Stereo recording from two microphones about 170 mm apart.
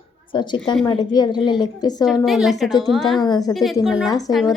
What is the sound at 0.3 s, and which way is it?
Speech, 25° left (ahead or behind).